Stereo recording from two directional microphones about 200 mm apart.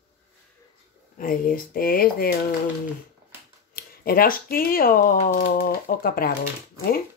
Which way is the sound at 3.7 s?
45° left (ahead or behind).